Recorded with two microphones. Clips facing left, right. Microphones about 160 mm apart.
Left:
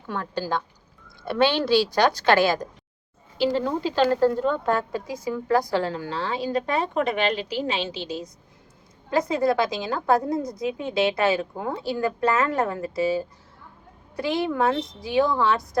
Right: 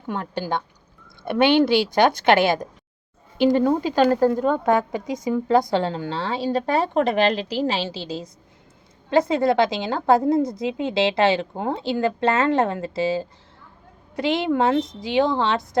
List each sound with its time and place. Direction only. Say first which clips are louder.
0.1 s a woman's voice: right 1 dB; 20° right (ahead or behind)
3.6 s speech: right 5 dB; 50° right (ahead or behind)
4.0 s a woman's voice: right 2 dB; 15° right (ahead or behind)
14.4 s a woman's voice: right 4 dB; 25° right (ahead or behind)